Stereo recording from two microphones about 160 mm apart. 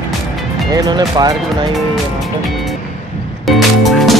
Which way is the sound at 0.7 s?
25° right (ahead or behind).